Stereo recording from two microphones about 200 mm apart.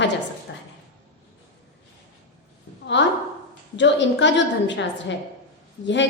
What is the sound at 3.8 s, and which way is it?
A woman's voice, 65° left (ahead or behind).